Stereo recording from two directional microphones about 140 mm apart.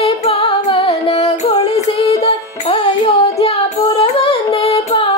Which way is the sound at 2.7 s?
45° left (ahead or behind).